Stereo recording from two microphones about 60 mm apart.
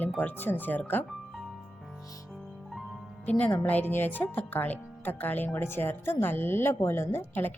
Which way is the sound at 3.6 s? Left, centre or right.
Left.